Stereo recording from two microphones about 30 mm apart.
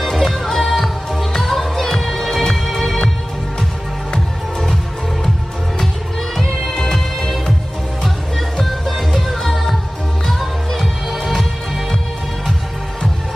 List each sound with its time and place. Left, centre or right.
0.0 s music: centre
6.7 s music: centre
11.1 s music: centre